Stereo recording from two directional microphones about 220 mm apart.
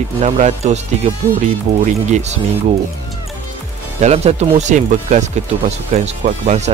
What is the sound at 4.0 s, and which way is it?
Speech, 30° right (ahead or behind).